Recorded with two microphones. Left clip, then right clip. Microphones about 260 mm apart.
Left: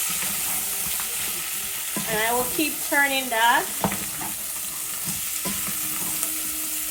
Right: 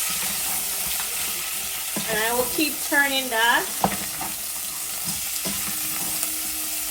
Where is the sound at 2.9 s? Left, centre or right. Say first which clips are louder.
Even; left.